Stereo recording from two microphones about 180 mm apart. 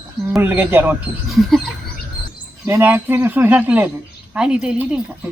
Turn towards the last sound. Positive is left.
turn(degrees=-5)  # may be behind; listen again after turning